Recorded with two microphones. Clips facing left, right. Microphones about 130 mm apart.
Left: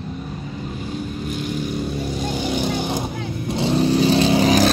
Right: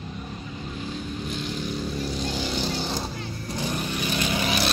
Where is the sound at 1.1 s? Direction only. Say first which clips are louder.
Left 5 dB; 5° left (ahead or behind); by 4.6 s 35° left (ahead or behind).